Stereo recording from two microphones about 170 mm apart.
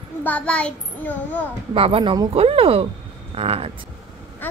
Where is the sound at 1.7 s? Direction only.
35° right (ahead or behind).